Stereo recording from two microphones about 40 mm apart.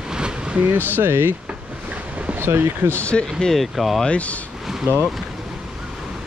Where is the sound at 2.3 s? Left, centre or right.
Right.